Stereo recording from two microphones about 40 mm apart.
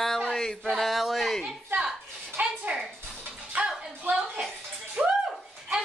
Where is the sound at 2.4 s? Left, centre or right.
Right.